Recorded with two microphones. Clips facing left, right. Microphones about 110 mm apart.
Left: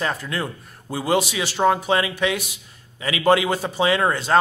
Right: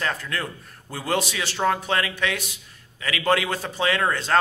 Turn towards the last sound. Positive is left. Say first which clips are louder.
# left 3 dB
turn(degrees=15)  # may be behind; listen again after turning